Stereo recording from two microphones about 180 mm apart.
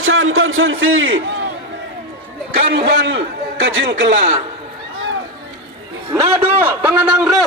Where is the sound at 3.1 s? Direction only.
90° right.